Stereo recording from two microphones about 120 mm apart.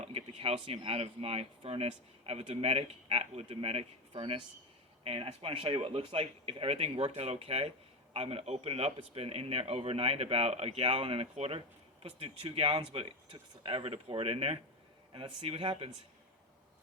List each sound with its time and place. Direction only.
0.0 s speech: 55° right (ahead or behind)